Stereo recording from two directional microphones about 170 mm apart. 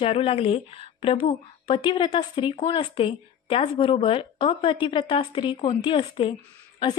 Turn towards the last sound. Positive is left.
turn(degrees=30)  # may be behind; listen again after turning